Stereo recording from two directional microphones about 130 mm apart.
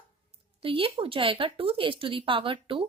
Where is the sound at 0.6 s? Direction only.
45° right (ahead or behind).